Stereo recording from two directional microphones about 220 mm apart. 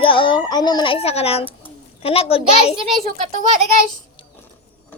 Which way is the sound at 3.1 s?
30° right (ahead or behind).